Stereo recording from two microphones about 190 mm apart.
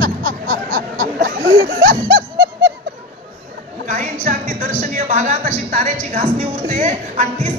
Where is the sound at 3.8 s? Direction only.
40° right (ahead or behind).